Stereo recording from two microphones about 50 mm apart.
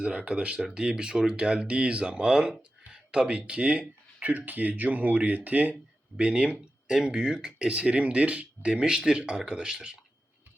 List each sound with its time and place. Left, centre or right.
0.0 s speech: right